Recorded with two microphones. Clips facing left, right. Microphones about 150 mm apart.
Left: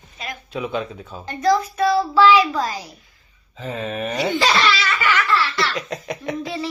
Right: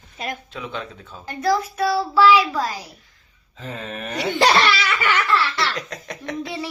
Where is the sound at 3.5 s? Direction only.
5° left (ahead or behind).